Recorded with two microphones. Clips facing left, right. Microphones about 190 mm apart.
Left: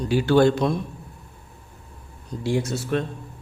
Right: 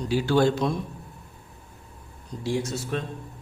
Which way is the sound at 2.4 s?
60° left (ahead or behind).